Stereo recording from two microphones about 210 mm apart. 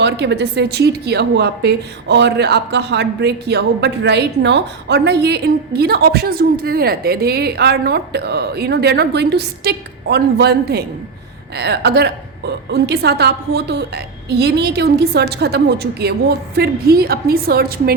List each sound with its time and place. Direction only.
0.0 s a woman's voice: 55° right (ahead or behind)